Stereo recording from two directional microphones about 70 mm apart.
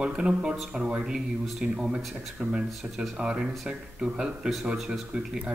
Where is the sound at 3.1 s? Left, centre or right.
Centre.